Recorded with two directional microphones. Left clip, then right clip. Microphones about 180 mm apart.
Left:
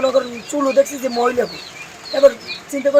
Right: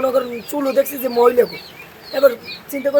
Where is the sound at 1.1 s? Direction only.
30° right (ahead or behind).